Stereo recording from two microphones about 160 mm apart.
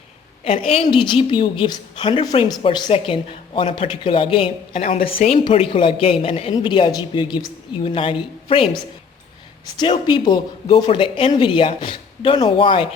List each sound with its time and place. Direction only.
0.4 s a woman's voice: 35° left (ahead or behind)
9.7 s speech: 30° left (ahead or behind)